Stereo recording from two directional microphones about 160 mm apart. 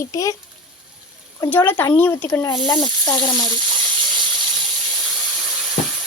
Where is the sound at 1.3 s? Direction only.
10° left (ahead or behind).